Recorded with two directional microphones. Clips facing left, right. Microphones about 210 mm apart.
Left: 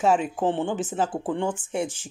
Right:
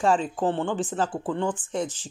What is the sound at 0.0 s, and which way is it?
A woman's voice, 10° left (ahead or behind).